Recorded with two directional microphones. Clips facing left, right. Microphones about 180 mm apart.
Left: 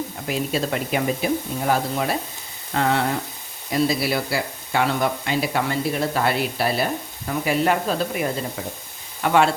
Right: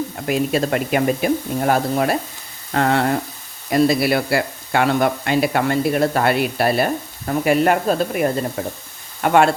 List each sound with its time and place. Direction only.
0.3 s speech: 60° right (ahead or behind)
2.7 s sizzle: 55° right (ahead or behind)
3.7 s speech: 60° right (ahead or behind)
8.6 s sizzle: 50° right (ahead or behind)